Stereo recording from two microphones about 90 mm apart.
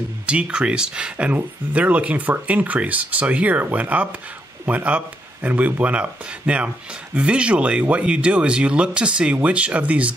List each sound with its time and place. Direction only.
0.3 s speech: 10° right (ahead or behind)